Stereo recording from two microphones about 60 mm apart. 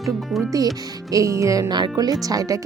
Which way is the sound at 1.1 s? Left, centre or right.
Right.